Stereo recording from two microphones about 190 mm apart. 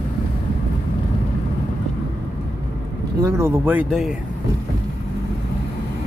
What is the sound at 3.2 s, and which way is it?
Speech, 15° right (ahead or behind).